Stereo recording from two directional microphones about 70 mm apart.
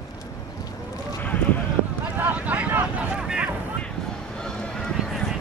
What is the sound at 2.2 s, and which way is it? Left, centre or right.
Vehicle, right.